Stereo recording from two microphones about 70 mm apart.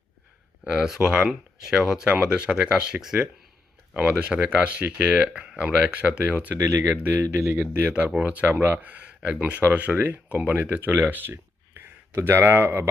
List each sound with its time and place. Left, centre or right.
0.6 s speech: centre
1.3 s speech: centre
3.9 s speech: centre
6.6 s speech: right